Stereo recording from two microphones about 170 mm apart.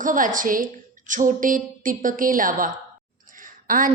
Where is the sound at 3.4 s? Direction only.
55° right (ahead or behind).